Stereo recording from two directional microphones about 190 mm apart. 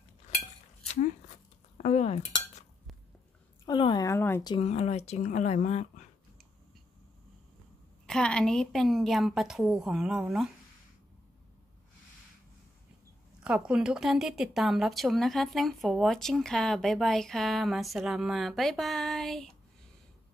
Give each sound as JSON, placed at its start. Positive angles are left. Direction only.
{"t": 1.8, "sound": "dishes", "side_deg": 35}
{"t": 3.6, "sound": "speech", "side_deg": 25}
{"t": 4.6, "sound": "speech", "side_deg": 35}
{"t": 8.1, "sound": "speech", "side_deg": 5}
{"t": 13.4, "sound": "speech", "side_deg": -5}